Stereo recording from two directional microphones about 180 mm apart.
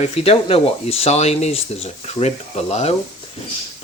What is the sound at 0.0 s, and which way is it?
Speech, 35° left (ahead or behind).